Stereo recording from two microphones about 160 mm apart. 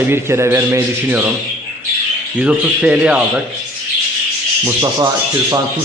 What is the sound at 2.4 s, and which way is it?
A man's voice, 5° right (ahead or behind).